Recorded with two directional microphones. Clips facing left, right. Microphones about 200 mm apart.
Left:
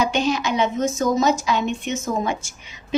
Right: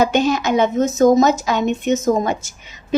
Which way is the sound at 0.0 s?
45° right (ahead or behind).